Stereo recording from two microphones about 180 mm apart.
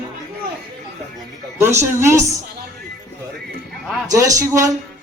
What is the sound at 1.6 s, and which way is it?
Speech, 15° right (ahead or behind).